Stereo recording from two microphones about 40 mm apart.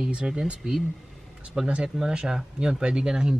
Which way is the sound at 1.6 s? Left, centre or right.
Right.